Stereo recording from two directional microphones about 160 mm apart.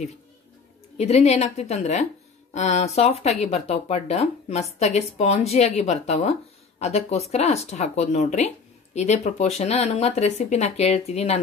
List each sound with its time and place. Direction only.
0.9 s speech: 45° left (ahead or behind)